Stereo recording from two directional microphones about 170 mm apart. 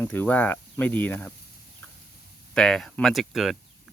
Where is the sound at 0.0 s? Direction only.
10° left (ahead or behind).